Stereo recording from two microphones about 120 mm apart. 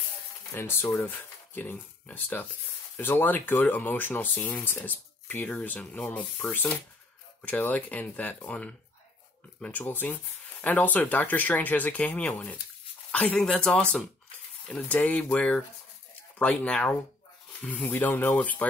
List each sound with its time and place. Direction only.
0.6 s speech: 20° left (ahead or behind)